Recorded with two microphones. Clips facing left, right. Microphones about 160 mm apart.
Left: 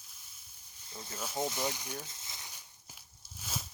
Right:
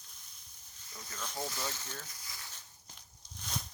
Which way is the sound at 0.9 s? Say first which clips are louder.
Left 4 dB; 30° left (ahead or behind).